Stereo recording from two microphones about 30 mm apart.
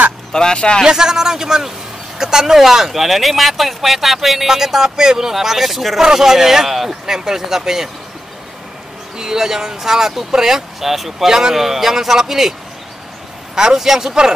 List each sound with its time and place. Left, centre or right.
0.3 s speech: left
0.8 s a man's voice: centre
4.8 s a man's voice: right
5.3 s speech: centre
9.2 s speech: centre
13.6 s speech: centre